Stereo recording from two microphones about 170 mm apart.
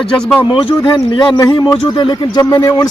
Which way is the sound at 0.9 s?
30° left (ahead or behind).